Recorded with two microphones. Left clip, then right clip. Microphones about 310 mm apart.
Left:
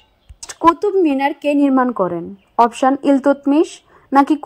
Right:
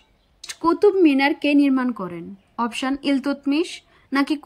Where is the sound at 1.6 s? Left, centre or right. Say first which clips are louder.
Left 6 dB; centre.